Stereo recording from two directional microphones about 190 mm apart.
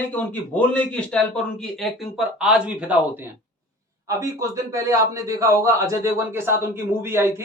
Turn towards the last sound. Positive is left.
turn(degrees=-15)  # may be behind; listen again after turning